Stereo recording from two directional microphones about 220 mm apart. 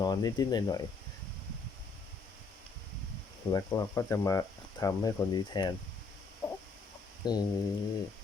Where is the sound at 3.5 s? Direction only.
15° left (ahead or behind).